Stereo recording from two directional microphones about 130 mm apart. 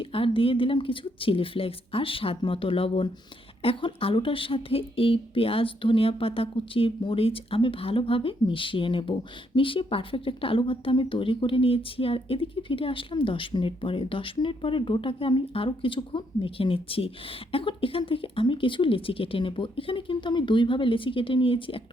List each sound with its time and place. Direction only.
0.0 s speech: 45° left (ahead or behind)